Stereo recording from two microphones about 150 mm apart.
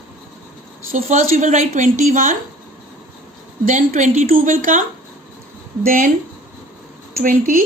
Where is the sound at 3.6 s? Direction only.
55° right (ahead or behind).